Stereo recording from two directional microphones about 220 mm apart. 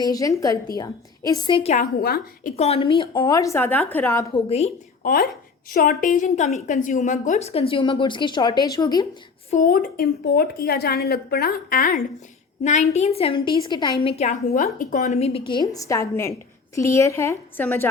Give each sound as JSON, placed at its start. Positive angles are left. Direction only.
{"t": 0.0, "sound": "a woman's voice", "side_deg": 15}
{"t": 2.6, "sound": "a woman's voice", "side_deg": 25}
{"t": 4.4, "sound": "a woman's voice", "side_deg": 30}
{"t": 5.7, "sound": "a woman's voice", "side_deg": 40}
{"t": 9.5, "sound": "a woman's voice", "side_deg": 40}